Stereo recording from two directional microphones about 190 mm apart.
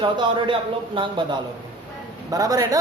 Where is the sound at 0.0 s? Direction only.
25° right (ahead or behind).